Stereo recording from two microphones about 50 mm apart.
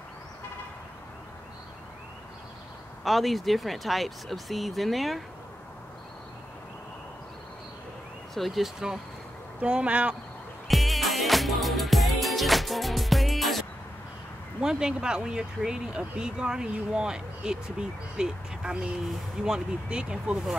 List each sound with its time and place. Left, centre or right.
3.0 s speech: centre
8.4 s speech: centre
9.6 s speech: right
10.7 s music: centre
14.6 s speech: centre